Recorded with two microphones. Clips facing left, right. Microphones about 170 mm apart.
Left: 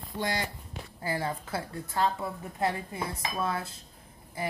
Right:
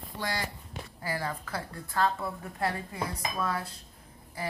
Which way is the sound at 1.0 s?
25° left (ahead or behind).